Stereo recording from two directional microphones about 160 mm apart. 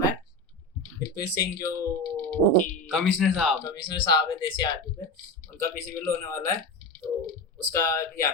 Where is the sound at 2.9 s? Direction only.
Centre (ahead or behind).